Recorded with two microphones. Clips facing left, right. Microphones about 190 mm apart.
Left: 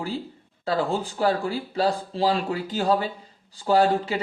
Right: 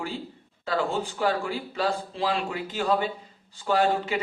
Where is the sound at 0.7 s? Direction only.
35° left (ahead or behind).